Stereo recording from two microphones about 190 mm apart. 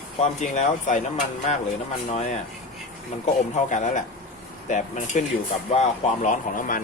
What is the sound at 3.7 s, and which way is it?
Speech, 40° left (ahead or behind).